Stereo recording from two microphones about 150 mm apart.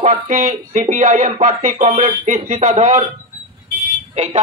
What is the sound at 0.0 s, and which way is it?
Speech, 50° right (ahead or behind).